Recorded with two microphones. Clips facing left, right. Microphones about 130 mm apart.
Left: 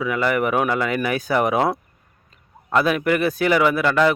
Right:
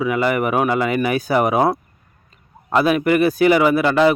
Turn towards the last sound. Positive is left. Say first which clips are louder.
# right 4 dB
turn(degrees=-5)  # may be behind; listen again after turning